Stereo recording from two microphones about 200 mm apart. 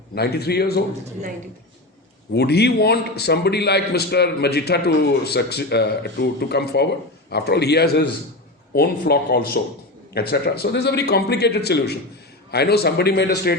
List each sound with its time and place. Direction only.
0.1 s a man's voice: 55° left (ahead or behind)
2.3 s a man's voice: 55° left (ahead or behind)